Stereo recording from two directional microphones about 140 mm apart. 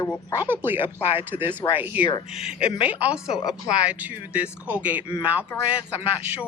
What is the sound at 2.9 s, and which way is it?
Speech, 10° right (ahead or behind).